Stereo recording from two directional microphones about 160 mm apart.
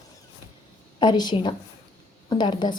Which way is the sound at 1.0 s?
25° left (ahead or behind).